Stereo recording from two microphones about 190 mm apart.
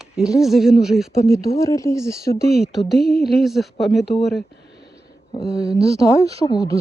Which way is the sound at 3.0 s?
55° left (ahead or behind).